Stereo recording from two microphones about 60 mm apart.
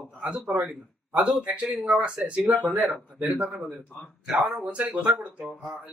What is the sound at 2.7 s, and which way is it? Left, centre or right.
Speech, right.